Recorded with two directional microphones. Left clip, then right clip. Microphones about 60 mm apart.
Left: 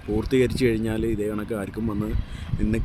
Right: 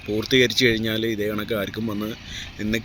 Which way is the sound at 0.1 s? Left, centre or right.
Left.